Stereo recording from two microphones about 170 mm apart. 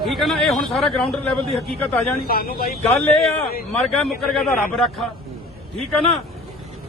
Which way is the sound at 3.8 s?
Centre (ahead or behind).